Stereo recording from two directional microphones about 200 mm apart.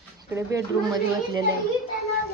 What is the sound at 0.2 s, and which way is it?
A child's voice, 15° right (ahead or behind).